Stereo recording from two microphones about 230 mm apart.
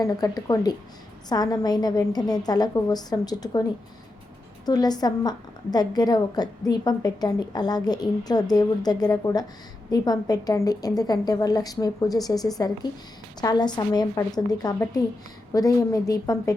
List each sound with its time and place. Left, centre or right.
0.0 s a woman's voice: centre